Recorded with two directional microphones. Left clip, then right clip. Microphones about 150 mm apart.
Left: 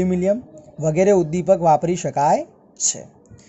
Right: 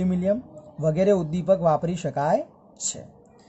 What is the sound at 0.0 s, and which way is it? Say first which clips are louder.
Speech: left 5 dB; 15° left (ahead or behind).